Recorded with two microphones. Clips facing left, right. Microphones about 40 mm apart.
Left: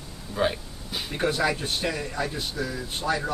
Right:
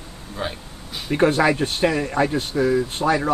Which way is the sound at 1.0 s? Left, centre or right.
Right.